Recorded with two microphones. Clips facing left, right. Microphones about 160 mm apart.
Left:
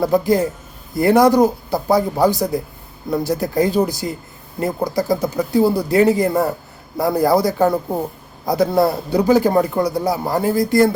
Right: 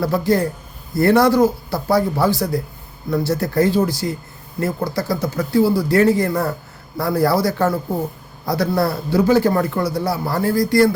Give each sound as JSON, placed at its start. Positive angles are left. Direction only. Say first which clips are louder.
{"t": 0.0, "sound": "speech", "louder": "left 2 dB", "side_deg": 15}